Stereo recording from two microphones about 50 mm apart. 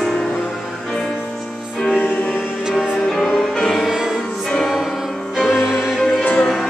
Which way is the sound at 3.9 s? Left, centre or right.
Centre.